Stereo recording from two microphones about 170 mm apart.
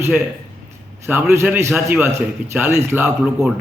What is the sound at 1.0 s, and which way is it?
A man's voice, 15° right (ahead or behind).